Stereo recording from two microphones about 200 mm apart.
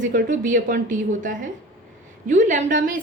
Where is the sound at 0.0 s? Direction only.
40° right (ahead or behind).